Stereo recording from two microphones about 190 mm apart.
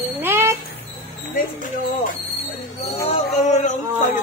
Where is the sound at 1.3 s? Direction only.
45° left (ahead or behind).